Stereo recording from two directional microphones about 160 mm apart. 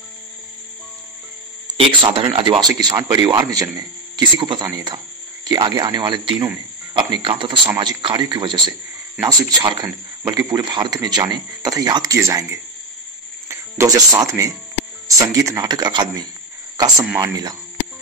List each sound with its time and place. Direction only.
1.8 s speech: 30° right (ahead or behind)